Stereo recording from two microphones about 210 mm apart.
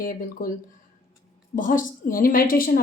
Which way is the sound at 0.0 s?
40° left (ahead or behind).